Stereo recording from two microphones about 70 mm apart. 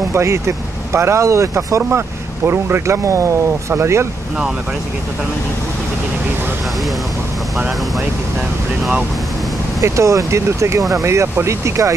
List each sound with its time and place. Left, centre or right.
0.1 s speech: right
9.8 s speech: right